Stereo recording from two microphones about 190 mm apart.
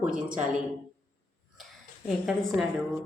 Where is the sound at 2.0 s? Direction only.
Centre (ahead or behind).